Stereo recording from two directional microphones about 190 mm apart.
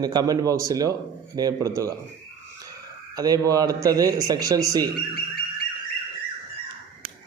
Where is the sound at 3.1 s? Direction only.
20° right (ahead or behind).